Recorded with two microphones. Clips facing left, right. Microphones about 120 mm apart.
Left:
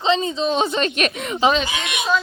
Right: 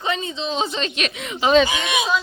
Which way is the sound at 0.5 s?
55° left (ahead or behind).